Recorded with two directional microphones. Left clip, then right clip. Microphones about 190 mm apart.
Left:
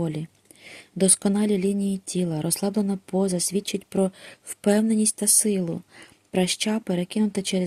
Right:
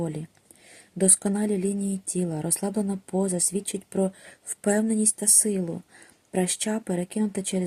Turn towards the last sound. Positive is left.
turn(degrees=30)  # may be behind; listen again after turning